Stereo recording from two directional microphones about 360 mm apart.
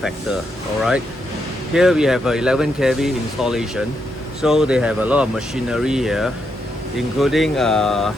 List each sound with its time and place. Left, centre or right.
1.7 s speech: centre